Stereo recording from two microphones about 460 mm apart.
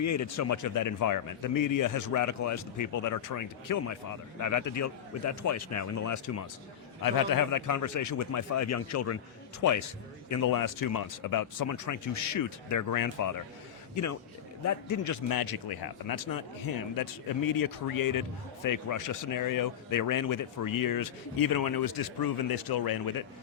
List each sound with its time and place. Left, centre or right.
0.0 s a man's voice: left